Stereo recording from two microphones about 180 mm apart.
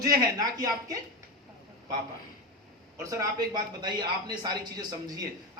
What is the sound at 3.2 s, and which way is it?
Speech, 20° right (ahead or behind).